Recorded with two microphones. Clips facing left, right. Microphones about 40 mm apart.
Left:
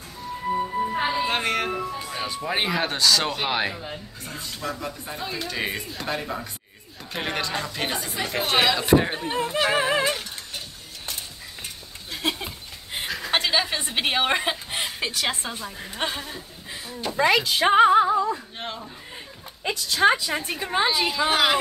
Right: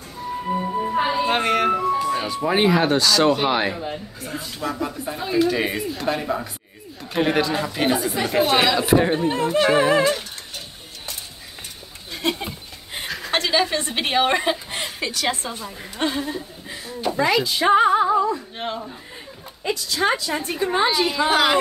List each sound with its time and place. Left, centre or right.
0.5 s music: centre
0.9 s music: centre
2.0 s speech: centre
12.1 s a sound: centre
13.4 s a woman's voice: centre
15.0 s a woman's voice: left
15.5 s speech: centre
17.1 s speech: centre
17.4 s speech: left
18.6 s speech: centre
19.6 s speech: left
20.5 s speech: centre